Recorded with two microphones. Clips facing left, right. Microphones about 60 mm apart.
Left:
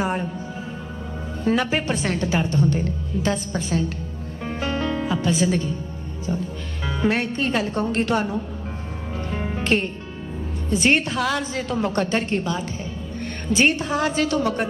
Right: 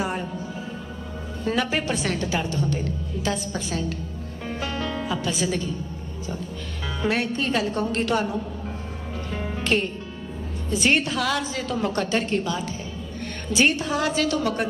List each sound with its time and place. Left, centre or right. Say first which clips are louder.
0.0 s music: left 3 dB; left
1.5 s a woman's voice: left 3 dB; centre
4.4 s music: left 4 dB; left
5.3 s a woman's voice: left 6 dB; left
6.8 s music: left 3 dB; centre
7.2 s a woman's voice: left 1 dB; left
9.1 s music: left 3 dB; centre
10.7 s a woman's voice: left 2 dB; left
13.8 s a woman's voice: left 1 dB; left